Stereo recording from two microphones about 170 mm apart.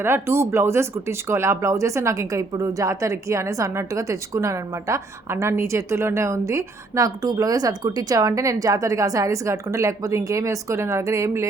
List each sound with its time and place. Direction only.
0.0 s speech: 15° right (ahead or behind)